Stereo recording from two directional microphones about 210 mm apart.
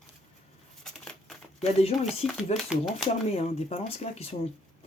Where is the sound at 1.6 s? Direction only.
30° left (ahead or behind).